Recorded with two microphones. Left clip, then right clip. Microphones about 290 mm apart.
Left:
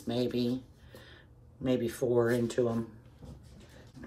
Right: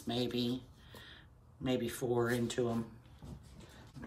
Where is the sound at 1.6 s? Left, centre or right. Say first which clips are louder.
Left 5 dB; centre.